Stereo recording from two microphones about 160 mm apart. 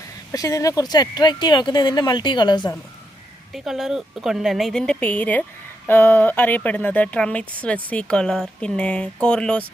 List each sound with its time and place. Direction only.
0.3 s speech: 20° left (ahead or behind)
3.5 s a woman's voice: centre (ahead or behind)